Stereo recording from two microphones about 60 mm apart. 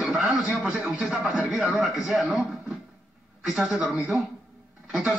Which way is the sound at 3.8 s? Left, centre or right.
Right.